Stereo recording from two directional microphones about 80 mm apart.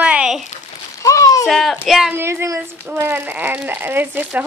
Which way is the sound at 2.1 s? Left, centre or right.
Right.